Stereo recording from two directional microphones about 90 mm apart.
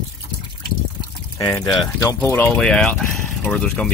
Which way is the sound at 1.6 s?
45° left (ahead or behind).